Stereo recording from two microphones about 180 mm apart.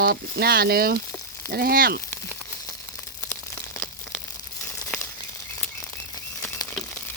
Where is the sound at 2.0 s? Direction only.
15° left (ahead or behind).